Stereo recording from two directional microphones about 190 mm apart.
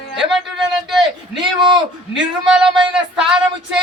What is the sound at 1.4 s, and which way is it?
Speech, 25° right (ahead or behind).